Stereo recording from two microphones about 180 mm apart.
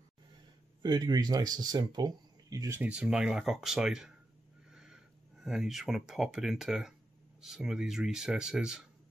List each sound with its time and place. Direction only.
0.8 s speech: 25° right (ahead or behind)
2.8 s speech: 5° right (ahead or behind)